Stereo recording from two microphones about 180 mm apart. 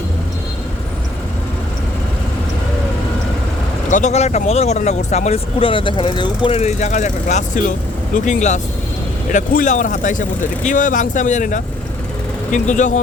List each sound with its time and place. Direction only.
3.8 s speech: 45° left (ahead or behind)